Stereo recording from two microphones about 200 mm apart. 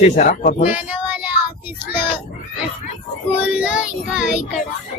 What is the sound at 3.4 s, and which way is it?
Child singing, 5° right (ahead or behind).